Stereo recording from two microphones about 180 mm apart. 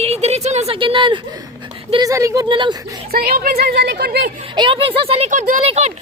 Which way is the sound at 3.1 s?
55° right (ahead or behind).